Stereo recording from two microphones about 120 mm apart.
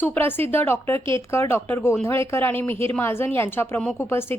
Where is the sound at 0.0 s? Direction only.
15° left (ahead or behind).